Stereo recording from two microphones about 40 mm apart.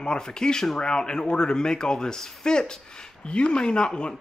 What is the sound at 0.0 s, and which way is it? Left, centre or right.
Speech, centre.